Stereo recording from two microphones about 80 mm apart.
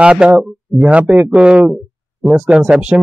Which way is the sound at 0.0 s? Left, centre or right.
Centre.